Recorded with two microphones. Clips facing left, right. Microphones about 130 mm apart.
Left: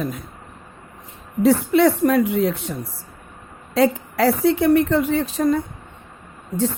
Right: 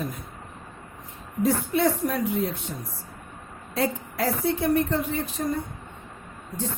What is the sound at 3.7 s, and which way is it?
Speech, 90° left.